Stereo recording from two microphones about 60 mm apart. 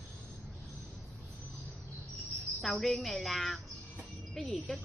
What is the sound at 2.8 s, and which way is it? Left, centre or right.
Speech, centre.